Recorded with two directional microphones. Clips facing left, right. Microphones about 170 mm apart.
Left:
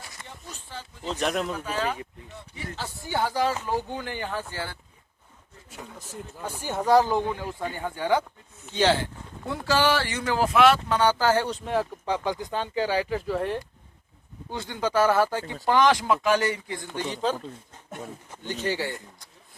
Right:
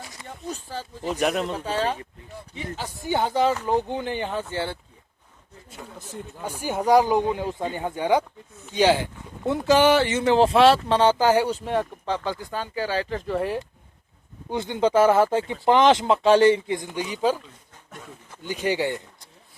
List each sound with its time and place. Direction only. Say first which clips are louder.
0.5 s speech: right 6 dB; 40° right (ahead or behind)
1.0 s speech: right 3 dB; 10° right (ahead or behind)
1.5 s speech: right 3 dB; 30° right (ahead or behind)
2.6 s speech: right 3 dB; 15° right (ahead or behind)
6.4 s speech: right 3 dB; 10° right (ahead or behind)
11.6 s speech: right 1 dB; centre (ahead or behind)
12.0 s speech: even; 15° left (ahead or behind); by 13.6 s centre (ahead or behind)
14.5 s speech: right 5 dB; 20° right (ahead or behind)
18.4 s speech: right 4 dB; 15° right (ahead or behind)